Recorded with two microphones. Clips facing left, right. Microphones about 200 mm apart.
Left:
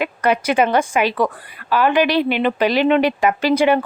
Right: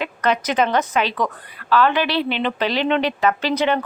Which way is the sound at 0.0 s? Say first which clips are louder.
Left 3 dB; 10° left (ahead or behind).